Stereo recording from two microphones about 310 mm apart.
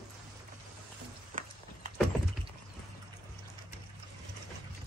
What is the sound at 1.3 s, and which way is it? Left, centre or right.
Walk, right.